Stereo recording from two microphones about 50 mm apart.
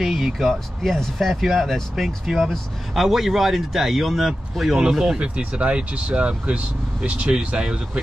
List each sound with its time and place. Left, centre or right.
0.0 s speech: centre; by 8.0 s right